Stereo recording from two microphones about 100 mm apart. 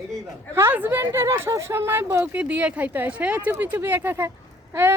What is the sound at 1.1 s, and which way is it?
Speech, 30° right (ahead or behind).